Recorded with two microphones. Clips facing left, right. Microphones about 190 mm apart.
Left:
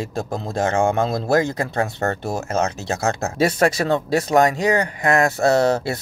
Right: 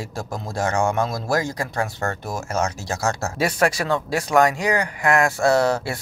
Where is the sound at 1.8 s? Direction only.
35° left (ahead or behind).